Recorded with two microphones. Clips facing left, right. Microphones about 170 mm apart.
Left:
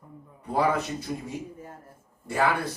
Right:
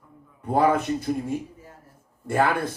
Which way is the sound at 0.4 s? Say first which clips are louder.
Right 4 dB; 50° right (ahead or behind).